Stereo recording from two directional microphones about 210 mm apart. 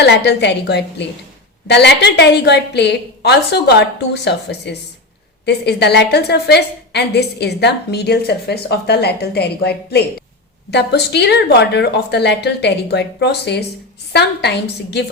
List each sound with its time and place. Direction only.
0.0 s a woman's voice: 55° left (ahead or behind)